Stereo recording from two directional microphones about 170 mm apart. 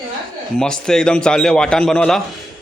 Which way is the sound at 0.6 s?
5° left (ahead or behind).